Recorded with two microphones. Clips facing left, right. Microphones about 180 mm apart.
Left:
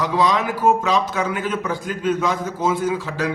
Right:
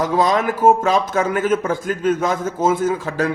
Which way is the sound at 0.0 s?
45° right (ahead or behind).